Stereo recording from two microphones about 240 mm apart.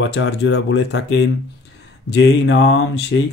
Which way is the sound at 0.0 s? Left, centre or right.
Left.